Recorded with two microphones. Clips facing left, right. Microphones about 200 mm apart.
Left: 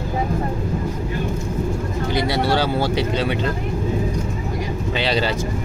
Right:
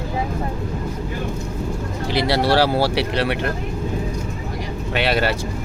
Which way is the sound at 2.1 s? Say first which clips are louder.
Right 2 dB; 80° right.